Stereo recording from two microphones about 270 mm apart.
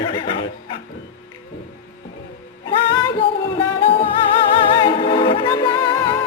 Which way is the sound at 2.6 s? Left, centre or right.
Centre.